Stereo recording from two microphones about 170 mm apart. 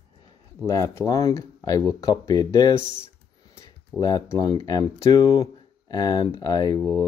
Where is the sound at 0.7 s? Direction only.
20° left (ahead or behind).